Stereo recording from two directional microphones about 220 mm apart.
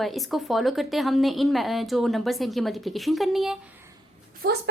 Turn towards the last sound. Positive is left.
turn(degrees=-45)  # may be behind; listen again after turning